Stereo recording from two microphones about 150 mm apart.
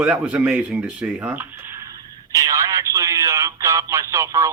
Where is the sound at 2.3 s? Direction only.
20° right (ahead or behind).